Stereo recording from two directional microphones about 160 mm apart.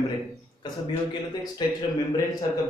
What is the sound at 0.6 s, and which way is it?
A man's voice, 25° left (ahead or behind).